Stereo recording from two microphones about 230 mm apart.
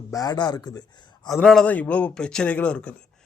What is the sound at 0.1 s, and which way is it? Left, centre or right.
A man's voice, centre.